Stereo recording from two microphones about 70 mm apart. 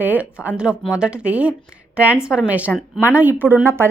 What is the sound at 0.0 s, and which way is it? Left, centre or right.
A woman's voice, right.